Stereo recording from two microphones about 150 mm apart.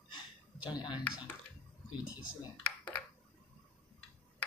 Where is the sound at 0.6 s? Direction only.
30° left (ahead or behind).